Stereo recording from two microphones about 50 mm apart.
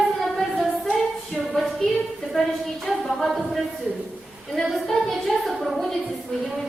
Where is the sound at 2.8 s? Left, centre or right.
Centre.